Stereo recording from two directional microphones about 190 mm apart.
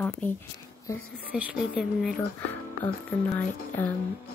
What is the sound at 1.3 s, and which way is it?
Speech, 5° right (ahead or behind).